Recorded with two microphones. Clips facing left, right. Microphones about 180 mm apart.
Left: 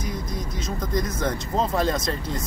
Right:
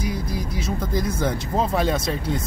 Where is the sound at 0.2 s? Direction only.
30° right (ahead or behind).